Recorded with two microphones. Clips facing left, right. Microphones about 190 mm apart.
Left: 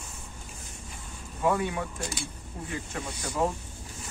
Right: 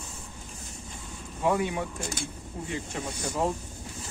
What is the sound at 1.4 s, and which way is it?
Speech, 20° right (ahead or behind).